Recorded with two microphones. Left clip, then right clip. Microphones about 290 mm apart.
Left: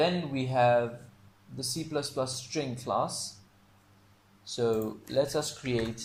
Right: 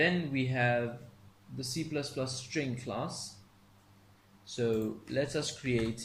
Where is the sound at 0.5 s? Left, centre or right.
Left.